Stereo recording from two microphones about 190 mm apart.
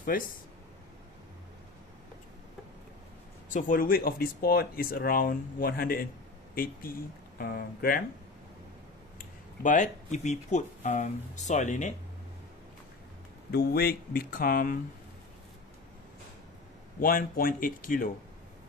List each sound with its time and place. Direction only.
0.1 s speech: 50° left (ahead or behind)
3.4 s speech: 45° left (ahead or behind)
9.2 s speech: 45° left (ahead or behind)
13.5 s speech: 55° left (ahead or behind)
17.0 s speech: 50° left (ahead or behind)